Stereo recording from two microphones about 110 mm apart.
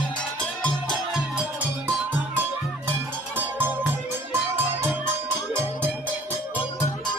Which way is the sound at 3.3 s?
20° right (ahead or behind).